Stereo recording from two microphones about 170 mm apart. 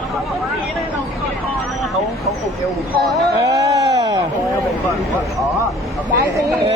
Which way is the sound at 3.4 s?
20° right (ahead or behind).